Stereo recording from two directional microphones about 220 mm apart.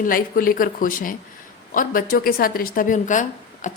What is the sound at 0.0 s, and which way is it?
Speech, 40° left (ahead or behind).